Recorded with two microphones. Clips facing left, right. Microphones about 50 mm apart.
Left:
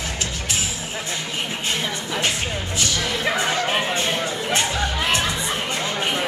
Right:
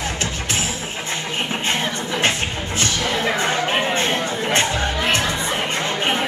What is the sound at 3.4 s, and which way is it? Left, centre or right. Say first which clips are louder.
Music: right 2 dB; right.